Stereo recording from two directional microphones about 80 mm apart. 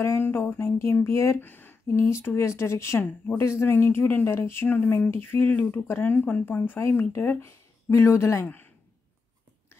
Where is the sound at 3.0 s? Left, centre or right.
Centre.